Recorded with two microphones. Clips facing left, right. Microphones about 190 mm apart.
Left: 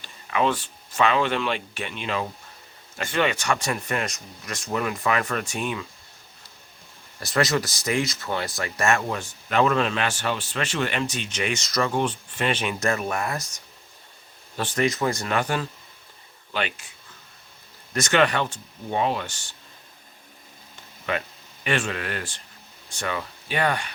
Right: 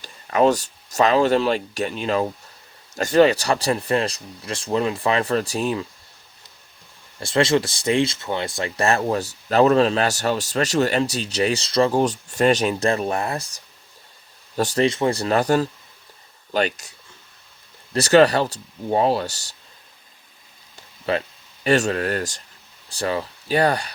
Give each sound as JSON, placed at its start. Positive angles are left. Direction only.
{"t": 0.0, "sound": "speech", "side_deg": -40}
{"t": 7.2, "sound": "speech", "side_deg": -25}
{"t": 17.9, "sound": "speech", "side_deg": -35}
{"t": 21.1, "sound": "speech", "side_deg": -35}